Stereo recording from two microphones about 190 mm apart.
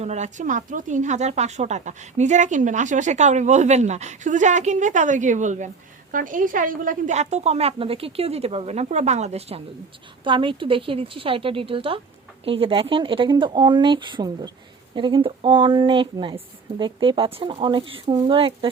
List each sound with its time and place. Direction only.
0.0 s a woman's voice: 35° right (ahead or behind)